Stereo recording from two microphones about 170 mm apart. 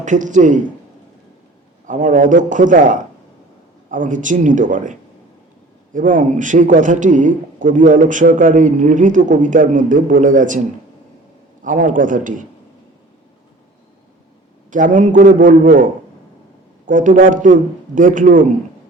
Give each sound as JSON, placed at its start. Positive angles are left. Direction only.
{"t": 0.0, "sound": "a man's voice", "side_deg": -45}
{"t": 1.9, "sound": "a man's voice", "side_deg": -50}
{"t": 11.6, "sound": "a man's voice", "side_deg": -50}
{"t": 14.7, "sound": "a man's voice", "side_deg": -50}